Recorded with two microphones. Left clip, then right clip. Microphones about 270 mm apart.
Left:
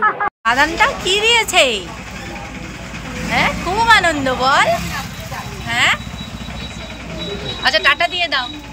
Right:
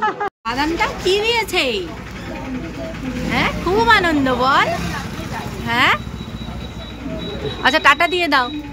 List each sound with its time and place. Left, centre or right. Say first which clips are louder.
0.5 s speech: left 6 dB; centre
3.3 s speech: left 2 dB; centre
7.6 s speech: right 1 dB; centre